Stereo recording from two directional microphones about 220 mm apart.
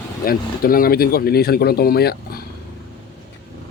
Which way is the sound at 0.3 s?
40° left (ahead or behind).